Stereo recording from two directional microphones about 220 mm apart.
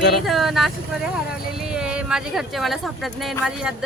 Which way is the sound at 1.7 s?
5° right (ahead or behind).